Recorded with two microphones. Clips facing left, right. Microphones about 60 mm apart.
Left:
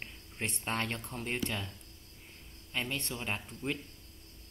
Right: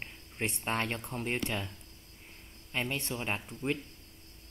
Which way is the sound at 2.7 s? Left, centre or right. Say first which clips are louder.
Right 2 dB; centre.